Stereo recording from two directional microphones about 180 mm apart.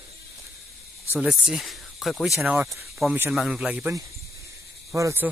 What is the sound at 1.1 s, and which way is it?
Speech, 5° right (ahead or behind).